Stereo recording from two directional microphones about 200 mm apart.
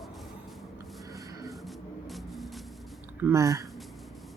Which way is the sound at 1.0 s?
15° right (ahead or behind).